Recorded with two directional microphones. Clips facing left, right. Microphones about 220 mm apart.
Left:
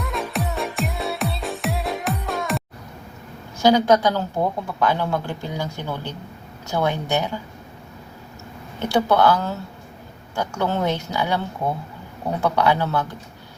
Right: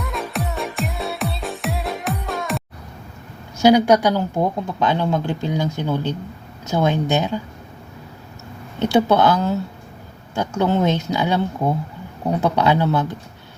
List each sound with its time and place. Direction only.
0.0 s music: centre (ahead or behind)
3.6 s speech: 15° right (ahead or behind)
8.8 s speech: 20° right (ahead or behind)
12.4 s speech: 20° right (ahead or behind)